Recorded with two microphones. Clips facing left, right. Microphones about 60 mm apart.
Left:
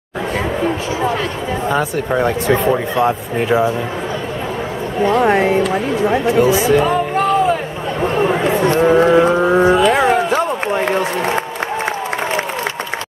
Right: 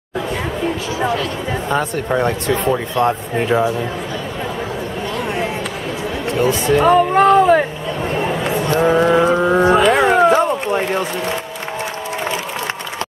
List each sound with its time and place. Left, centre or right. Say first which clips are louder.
1.7 s speech: left 1 dB; centre
5.2 s a sound: left 7 dB; left
6.2 s speech: left 1 dB; centre
6.9 s music: right 4 dB; right
8.8 s speech: left 2 dB; centre
9.3 s a sound: left 1 dB; centre